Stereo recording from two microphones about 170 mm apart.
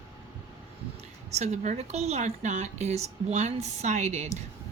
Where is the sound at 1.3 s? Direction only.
45° right (ahead or behind).